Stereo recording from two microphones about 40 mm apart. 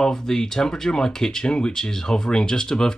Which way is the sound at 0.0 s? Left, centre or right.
Centre.